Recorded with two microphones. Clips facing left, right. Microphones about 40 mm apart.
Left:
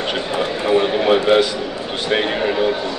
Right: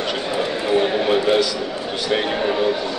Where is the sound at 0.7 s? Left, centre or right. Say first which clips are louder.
Left 3 dB; left.